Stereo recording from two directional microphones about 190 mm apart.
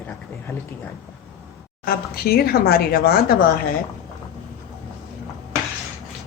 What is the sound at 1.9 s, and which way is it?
Speech, 55° left (ahead or behind).